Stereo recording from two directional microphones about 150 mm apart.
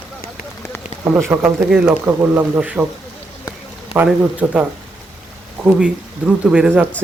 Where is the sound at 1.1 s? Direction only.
15° right (ahead or behind).